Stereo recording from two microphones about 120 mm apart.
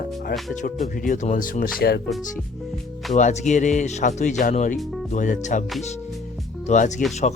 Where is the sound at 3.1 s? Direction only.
85° left.